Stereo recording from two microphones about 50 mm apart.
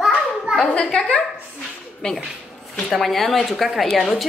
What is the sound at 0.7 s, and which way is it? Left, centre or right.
Speech, centre.